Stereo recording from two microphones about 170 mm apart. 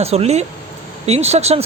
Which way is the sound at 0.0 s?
40° right (ahead or behind).